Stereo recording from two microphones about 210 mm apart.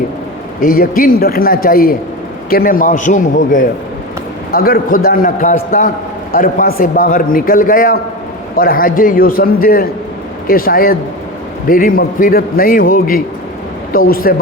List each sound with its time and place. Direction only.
0.6 s a man's voice: 40° left (ahead or behind)